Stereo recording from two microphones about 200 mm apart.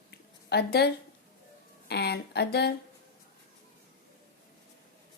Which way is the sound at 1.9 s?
55° left (ahead or behind).